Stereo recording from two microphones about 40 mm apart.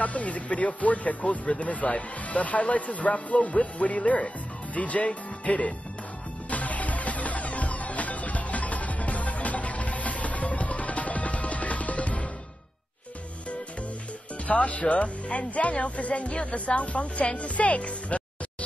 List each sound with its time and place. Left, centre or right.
0.0 s speech: left
6.5 s music: left
14.5 s speech: left